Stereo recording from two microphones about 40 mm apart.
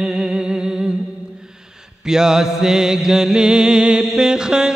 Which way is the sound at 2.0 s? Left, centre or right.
Centre.